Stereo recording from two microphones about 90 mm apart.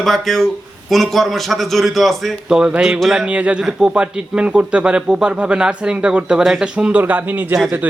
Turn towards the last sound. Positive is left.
turn(degrees=-20)  # may be behind; listen again after turning